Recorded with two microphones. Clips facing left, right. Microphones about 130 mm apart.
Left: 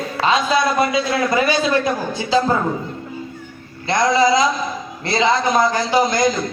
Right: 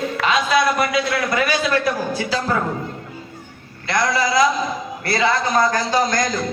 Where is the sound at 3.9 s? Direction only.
25° left (ahead or behind).